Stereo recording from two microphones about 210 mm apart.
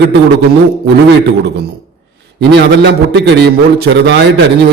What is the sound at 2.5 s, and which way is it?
A man's voice, 55° right (ahead or behind).